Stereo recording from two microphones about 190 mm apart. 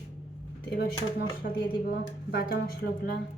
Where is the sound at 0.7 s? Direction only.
55° left (ahead or behind).